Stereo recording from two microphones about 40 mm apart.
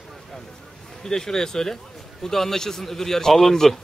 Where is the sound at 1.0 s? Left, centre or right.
Centre.